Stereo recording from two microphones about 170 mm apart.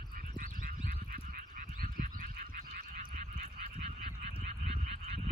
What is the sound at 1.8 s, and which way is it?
Frog, 55° right (ahead or behind).